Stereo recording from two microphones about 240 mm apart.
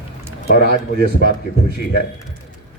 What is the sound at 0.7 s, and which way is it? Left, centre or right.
Speech, right.